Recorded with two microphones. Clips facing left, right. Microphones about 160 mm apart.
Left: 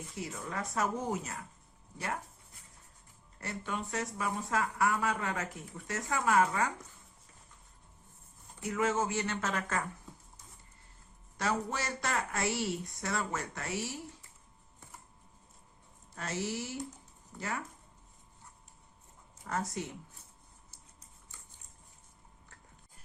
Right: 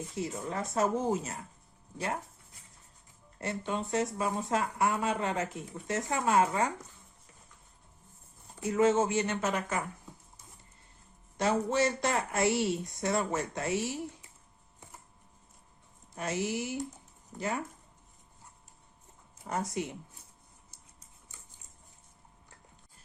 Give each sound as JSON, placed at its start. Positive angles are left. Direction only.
{"t": 0.2, "sound": "speech", "side_deg": -25}
{"t": 3.4, "sound": "speech", "side_deg": -25}
{"t": 8.6, "sound": "speech", "side_deg": -25}
{"t": 11.3, "sound": "speech", "side_deg": -25}
{"t": 16.1, "sound": "speech", "side_deg": -15}
{"t": 19.5, "sound": "speech", "side_deg": -15}